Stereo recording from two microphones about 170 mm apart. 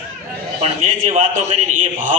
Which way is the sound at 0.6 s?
45° right (ahead or behind).